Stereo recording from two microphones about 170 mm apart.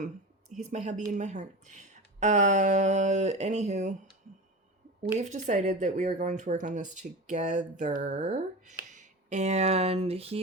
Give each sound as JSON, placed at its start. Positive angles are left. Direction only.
{"t": 0.5, "sound": "speech", "side_deg": -45}
{"t": 5.1, "sound": "speech", "side_deg": -45}